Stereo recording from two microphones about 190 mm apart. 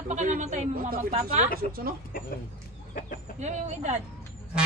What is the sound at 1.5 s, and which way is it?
Speech, 50° right (ahead or behind).